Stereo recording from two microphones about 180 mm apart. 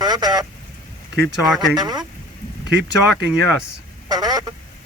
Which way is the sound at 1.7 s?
20° right (ahead or behind).